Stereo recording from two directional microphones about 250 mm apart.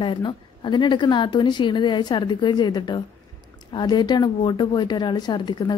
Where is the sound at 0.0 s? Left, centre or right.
Centre.